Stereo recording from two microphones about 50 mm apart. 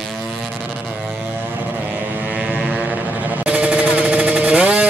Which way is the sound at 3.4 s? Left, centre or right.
Right.